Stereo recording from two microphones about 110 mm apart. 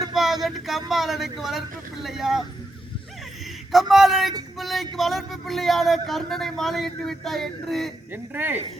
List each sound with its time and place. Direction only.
0.1 s speech: centre (ahead or behind)
3.7 s speech: centre (ahead or behind)
8.1 s speech: 15° right (ahead or behind)